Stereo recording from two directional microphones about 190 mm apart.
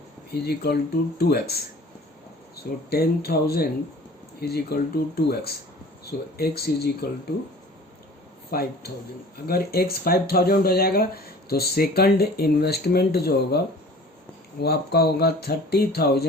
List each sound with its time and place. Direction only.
0.3 s speech: 55° left (ahead or behind)
2.9 s speech: 55° left (ahead or behind)
8.4 s speech: 55° left (ahead or behind)
14.6 s speech: 55° left (ahead or behind)